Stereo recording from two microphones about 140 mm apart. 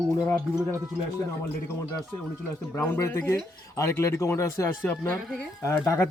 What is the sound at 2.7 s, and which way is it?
Speech, 15° left (ahead or behind).